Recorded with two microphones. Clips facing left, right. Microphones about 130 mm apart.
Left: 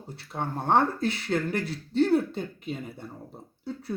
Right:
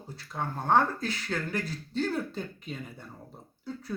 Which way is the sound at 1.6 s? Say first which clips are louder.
Left 4 dB; 70° left (ahead or behind).